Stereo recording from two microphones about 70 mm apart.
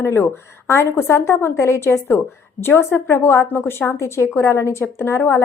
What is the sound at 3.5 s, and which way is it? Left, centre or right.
A woman's voice, left.